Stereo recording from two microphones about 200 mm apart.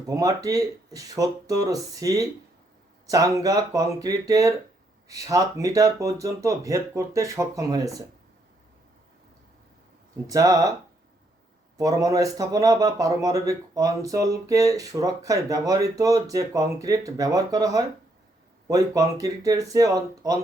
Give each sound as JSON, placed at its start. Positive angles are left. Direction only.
{"t": 0.1, "sound": "speech", "side_deg": -15}
{"t": 10.2, "sound": "speech", "side_deg": -15}
{"t": 11.8, "sound": "speech", "side_deg": -15}